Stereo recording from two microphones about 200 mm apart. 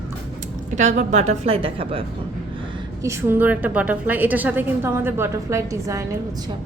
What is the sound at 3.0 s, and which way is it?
A woman's voice, 15° right (ahead or behind).